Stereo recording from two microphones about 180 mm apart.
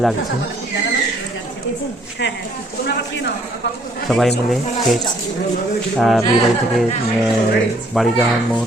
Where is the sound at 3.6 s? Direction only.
70° left (ahead or behind).